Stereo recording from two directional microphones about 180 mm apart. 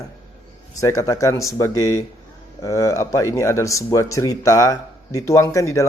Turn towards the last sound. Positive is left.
turn(degrees=15)  # may be behind; listen again after turning